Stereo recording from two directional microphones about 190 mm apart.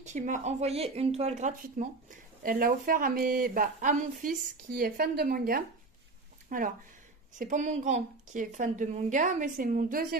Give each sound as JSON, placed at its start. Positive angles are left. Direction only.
{"t": 0.0, "sound": "a woman's voice", "side_deg": -40}